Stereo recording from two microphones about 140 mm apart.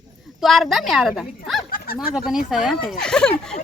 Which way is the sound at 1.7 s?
90° left.